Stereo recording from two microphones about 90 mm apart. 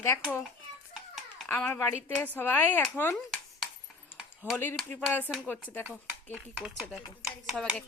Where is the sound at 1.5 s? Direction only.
20° left (ahead or behind).